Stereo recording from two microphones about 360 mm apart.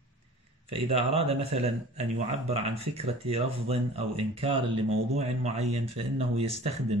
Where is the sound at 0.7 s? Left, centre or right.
Centre.